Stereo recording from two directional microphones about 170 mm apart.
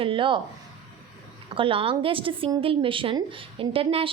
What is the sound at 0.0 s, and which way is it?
Speech, 30° right (ahead or behind).